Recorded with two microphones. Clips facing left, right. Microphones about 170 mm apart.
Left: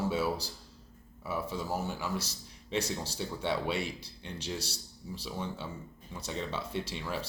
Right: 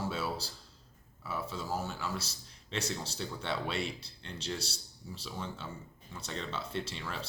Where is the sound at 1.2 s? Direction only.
15° left (ahead or behind).